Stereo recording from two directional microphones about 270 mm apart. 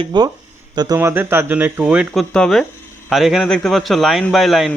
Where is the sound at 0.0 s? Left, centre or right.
Centre.